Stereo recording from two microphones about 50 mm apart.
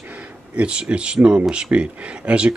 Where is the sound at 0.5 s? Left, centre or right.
Right.